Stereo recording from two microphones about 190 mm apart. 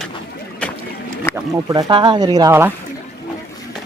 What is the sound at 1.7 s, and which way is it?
Speech, 20° right (ahead or behind).